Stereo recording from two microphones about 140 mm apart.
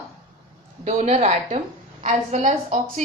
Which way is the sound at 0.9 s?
50° right (ahead or behind).